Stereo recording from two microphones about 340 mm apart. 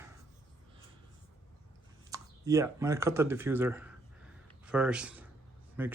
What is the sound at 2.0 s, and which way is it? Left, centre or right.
A man's voice, centre.